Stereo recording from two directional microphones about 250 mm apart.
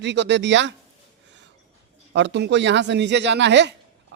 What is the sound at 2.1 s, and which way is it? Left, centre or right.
Speech, right.